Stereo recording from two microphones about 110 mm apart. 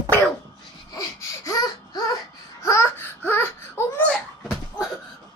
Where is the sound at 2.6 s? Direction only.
25° left (ahead or behind).